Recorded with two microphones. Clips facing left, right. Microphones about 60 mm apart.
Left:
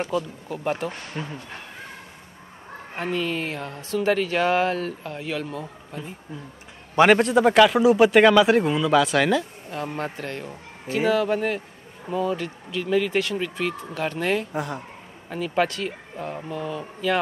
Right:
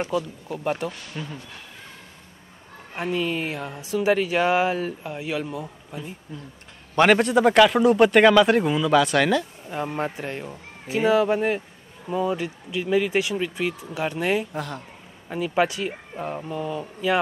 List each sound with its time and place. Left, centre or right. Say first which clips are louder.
0.0 s speech: even; centre
0.8 s speech: left 1 dB; left
3.0 s speech: right 1 dB; centre
9.7 s speech: right 2 dB; centre
14.5 s a man's voice: left 2 dB; centre
15.2 s speech: right 1 dB; centre